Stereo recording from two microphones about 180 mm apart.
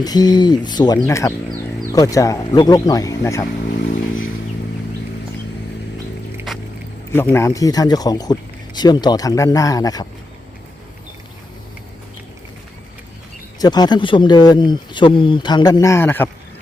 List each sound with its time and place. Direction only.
0.0 s speech: 20° left (ahead or behind)
3.7 s motorcycle: 45° left (ahead or behind)
7.1 s speech: 15° left (ahead or behind)
13.6 s speech: 25° left (ahead or behind)